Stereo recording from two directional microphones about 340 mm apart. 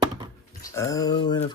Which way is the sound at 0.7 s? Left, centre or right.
Centre.